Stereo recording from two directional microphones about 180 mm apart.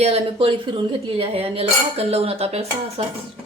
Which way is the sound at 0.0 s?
30° right (ahead or behind).